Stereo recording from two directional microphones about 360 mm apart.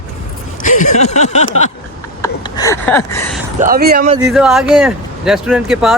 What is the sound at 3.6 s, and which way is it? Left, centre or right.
Speech, right.